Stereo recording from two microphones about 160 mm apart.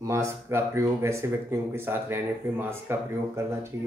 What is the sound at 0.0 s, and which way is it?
Speech, 20° right (ahead or behind).